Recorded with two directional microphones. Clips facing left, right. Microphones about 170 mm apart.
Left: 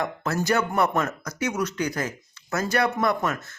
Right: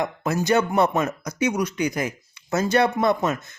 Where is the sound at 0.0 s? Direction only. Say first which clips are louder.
Right 2 dB; 15° right (ahead or behind).